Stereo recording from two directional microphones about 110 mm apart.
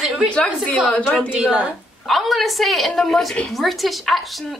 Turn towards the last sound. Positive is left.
turn(degrees=0)  # may be behind; listen again after turning